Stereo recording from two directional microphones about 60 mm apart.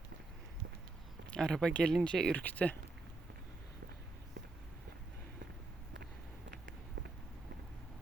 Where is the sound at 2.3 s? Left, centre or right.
Left.